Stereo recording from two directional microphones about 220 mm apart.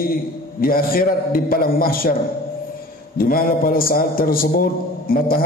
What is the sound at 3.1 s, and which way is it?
A man's voice, 40° left (ahead or behind).